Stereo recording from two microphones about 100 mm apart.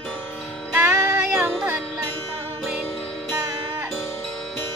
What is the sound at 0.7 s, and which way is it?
Music, 20° right (ahead or behind).